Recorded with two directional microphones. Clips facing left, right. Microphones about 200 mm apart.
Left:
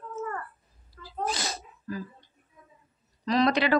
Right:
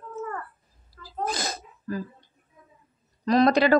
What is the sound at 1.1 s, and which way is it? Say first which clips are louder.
Sneeze: right 2 dB; 50° right (ahead or behind).